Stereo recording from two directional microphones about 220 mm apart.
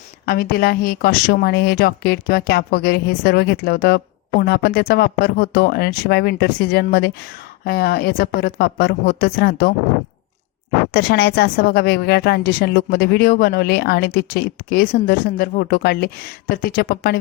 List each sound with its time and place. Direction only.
0.5 s speech: 45° left (ahead or behind)
10.9 s speech: 45° left (ahead or behind)